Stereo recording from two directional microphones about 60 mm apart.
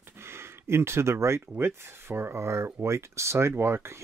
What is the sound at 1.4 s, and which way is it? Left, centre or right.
Speech, right.